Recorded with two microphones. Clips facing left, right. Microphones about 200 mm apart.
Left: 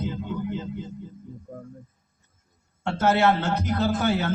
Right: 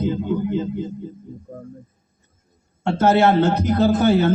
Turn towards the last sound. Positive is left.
turn(degrees=-30)  # may be behind; listen again after turning